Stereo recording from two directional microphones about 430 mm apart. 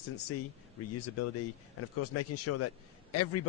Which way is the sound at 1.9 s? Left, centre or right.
Left.